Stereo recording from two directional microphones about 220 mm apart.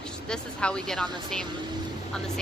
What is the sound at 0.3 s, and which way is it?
Speech, 5° left (ahead or behind).